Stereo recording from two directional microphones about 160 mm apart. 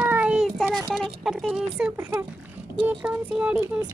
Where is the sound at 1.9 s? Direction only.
15° right (ahead or behind).